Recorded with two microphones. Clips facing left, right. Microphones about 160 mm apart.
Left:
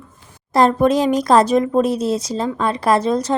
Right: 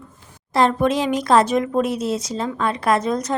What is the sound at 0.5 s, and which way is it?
A woman's voice, 40° left (ahead or behind).